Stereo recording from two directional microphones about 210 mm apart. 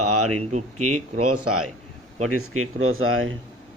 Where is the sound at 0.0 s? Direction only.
90° right.